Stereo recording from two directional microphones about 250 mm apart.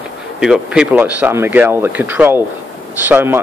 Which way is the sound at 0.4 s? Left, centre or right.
Centre.